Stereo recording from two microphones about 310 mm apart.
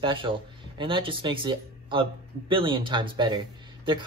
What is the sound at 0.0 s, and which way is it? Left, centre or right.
Speech, centre.